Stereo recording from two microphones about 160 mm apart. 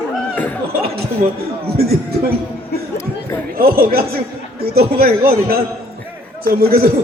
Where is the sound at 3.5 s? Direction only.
65° right (ahead or behind).